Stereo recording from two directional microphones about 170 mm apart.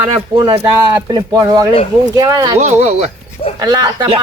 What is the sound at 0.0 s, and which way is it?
Speech, 30° right (ahead or behind).